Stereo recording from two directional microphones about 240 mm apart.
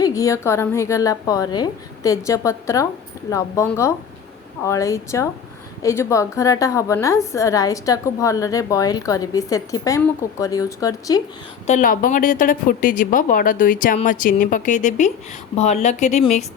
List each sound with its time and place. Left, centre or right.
0.0 s a woman's voice: centre
11.6 s speech: left